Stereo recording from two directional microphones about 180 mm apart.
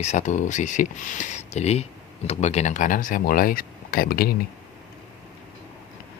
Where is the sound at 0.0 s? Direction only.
40° left (ahead or behind); by 4.4 s 60° left (ahead or behind).